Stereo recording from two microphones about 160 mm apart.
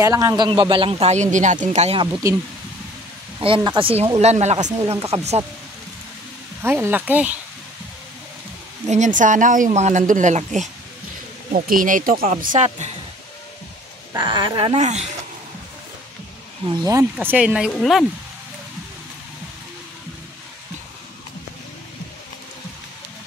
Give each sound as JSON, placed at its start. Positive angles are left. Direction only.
{"t": 0.0, "sound": "a man's voice", "side_deg": -20}
{"t": 2.2, "sound": "a man's voice", "side_deg": -20}
{"t": 6.6, "sound": "speech", "side_deg": -15}
{"t": 8.8, "sound": "a woman's voice", "side_deg": -50}
{"t": 14.1, "sound": "speech", "side_deg": -30}
{"t": 14.8, "sound": "a woman's voice", "side_deg": -45}
{"t": 16.8, "sound": "speech", "side_deg": -15}